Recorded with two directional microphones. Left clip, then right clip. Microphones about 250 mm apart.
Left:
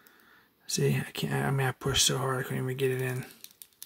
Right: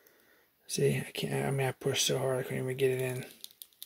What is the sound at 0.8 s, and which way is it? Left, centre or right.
Speech, left.